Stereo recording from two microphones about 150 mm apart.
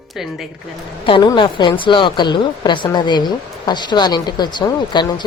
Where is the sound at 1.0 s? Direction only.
30° left (ahead or behind).